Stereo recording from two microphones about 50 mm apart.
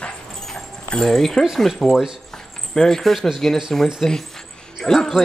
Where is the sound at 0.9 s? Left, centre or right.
Centre.